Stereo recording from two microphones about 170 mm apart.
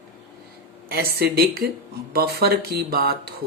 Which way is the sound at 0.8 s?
65° right (ahead or behind).